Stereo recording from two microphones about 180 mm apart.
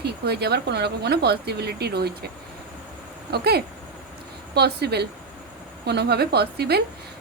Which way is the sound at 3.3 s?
60° right (ahead or behind).